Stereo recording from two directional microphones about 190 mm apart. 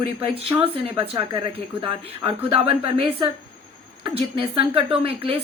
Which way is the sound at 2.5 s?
30° right (ahead or behind).